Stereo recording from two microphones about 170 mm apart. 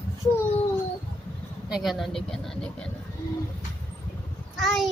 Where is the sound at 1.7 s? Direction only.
Centre (ahead or behind).